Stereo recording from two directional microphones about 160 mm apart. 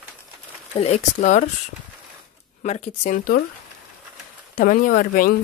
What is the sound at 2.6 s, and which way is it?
Speech, 45° left (ahead or behind).